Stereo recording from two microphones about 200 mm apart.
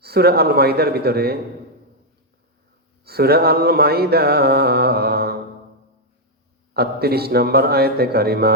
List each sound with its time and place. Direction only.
0.0 s music: 50° right (ahead or behind)
3.0 s music: 50° right (ahead or behind)
6.7 s music: 50° right (ahead or behind)